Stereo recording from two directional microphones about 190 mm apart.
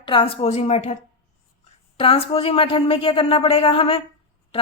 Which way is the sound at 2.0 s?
30° left (ahead or behind).